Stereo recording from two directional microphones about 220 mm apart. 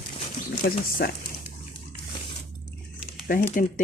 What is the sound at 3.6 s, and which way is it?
Speech, 40° left (ahead or behind).